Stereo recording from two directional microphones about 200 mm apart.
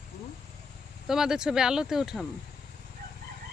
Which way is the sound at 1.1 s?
5° right (ahead or behind).